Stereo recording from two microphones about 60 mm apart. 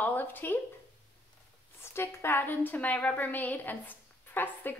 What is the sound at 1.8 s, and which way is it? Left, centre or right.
A woman's voice, left.